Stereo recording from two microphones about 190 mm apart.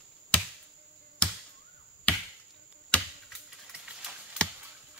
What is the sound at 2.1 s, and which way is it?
Chop, 5° left (ahead or behind).